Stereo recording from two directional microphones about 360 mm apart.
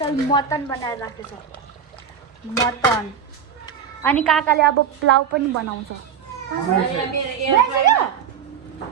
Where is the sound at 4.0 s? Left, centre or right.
Centre.